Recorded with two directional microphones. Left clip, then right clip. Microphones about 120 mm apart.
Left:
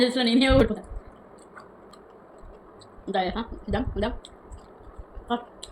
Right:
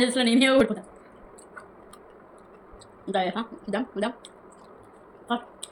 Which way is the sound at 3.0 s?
25° right (ahead or behind).